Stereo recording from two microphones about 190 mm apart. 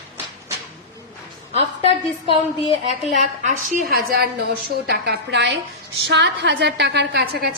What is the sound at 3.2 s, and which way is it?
A woman's voice, 45° right (ahead or behind).